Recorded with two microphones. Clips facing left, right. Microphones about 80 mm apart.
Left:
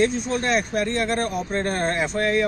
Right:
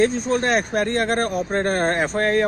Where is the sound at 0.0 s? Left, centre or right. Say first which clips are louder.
Right 3 dB; right.